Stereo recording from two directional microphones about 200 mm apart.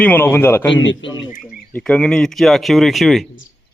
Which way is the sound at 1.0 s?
65° left (ahead or behind).